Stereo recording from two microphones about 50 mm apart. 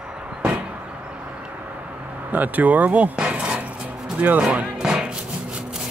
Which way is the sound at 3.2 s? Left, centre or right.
Right.